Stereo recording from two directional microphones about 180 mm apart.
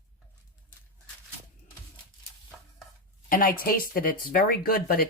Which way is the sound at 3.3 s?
50° left (ahead or behind).